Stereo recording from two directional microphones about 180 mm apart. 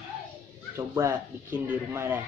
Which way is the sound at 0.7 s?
15° right (ahead or behind).